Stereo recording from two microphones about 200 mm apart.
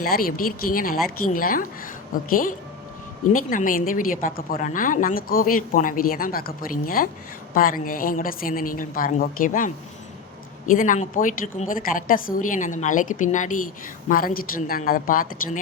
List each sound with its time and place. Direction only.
0.0 s a woman's voice: 45° left (ahead or behind)